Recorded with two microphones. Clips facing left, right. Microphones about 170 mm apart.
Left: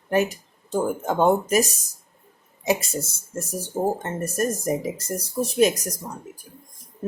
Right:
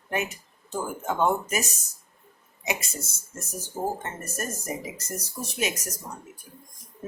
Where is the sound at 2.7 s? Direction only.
30° left (ahead or behind).